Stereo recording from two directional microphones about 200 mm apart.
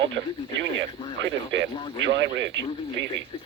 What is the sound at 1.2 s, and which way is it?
A man's voice, 65° right (ahead or behind).